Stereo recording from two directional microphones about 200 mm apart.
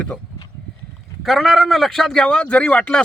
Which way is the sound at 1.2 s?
Centre (ahead or behind).